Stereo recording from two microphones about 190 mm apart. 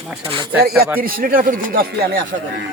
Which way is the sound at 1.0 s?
50° right (ahead or behind).